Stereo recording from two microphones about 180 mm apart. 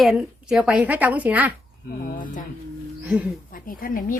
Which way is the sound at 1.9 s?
55° left (ahead or behind).